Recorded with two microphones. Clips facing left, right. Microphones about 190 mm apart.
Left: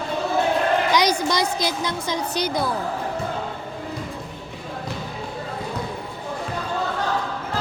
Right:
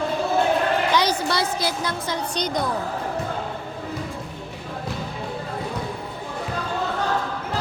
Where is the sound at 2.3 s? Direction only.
5° left (ahead or behind).